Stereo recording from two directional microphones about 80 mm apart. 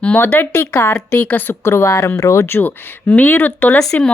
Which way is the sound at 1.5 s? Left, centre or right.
Left.